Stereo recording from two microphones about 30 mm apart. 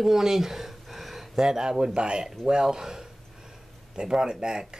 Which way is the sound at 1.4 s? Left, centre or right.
Right.